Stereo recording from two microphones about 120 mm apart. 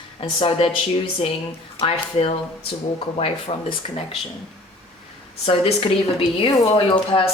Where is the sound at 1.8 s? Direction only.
55° left (ahead or behind).